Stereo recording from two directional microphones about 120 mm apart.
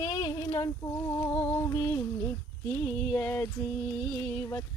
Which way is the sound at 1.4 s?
15° left (ahead or behind).